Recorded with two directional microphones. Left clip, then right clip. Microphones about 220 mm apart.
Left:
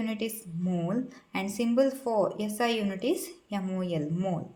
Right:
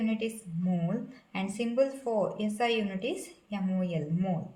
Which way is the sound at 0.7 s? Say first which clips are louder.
Left 3 dB; 30° left (ahead or behind).